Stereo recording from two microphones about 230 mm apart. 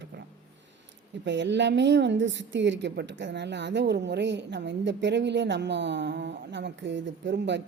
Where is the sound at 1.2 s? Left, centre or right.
Right.